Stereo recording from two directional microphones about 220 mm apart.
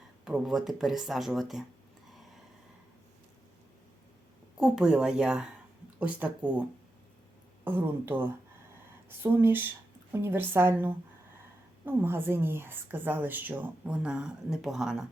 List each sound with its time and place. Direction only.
0.3 s speech: centre (ahead or behind)
4.5 s a woman's voice: 5° right (ahead or behind)
8.7 s a sound: 10° right (ahead or behind)
10.1 s a woman's voice: 10° right (ahead or behind)